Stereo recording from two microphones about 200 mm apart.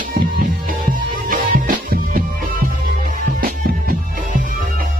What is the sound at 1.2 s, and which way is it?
Music, 45° right (ahead or behind).